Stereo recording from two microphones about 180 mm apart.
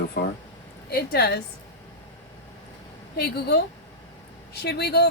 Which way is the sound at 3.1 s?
60° left (ahead or behind).